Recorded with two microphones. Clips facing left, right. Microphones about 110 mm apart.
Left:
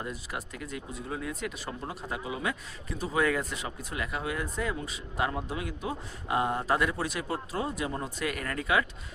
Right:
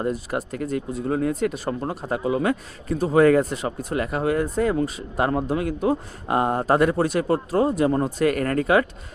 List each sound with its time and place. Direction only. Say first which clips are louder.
0.0 s speech: right 12 dB; 45° right (ahead or behind)